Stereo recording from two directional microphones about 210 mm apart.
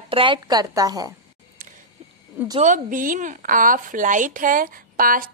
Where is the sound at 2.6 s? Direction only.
40° right (ahead or behind).